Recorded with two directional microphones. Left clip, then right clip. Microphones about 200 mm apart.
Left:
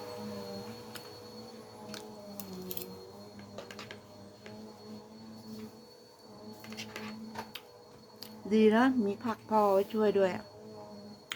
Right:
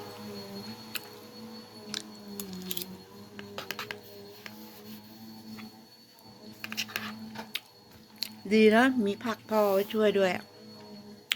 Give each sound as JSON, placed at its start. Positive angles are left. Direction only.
{"t": 1.9, "sound": "music", "side_deg": 15}
{"t": 6.6, "sound": "music", "side_deg": -35}
{"t": 8.2, "sound": "speech", "side_deg": 5}
{"t": 11.3, "sound": "a sound", "side_deg": 5}